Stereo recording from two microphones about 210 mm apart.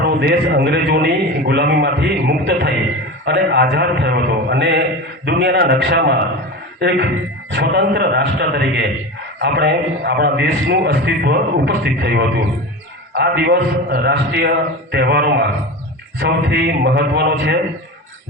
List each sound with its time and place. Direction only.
0.0 s a man's voice: 55° right (ahead or behind)